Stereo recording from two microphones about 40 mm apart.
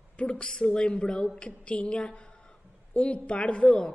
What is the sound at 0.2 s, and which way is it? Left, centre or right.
A man's voice, left.